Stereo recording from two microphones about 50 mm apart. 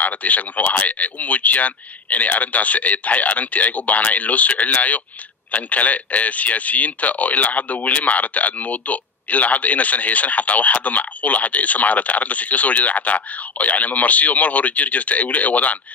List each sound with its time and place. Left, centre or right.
0.0 s a man's voice: left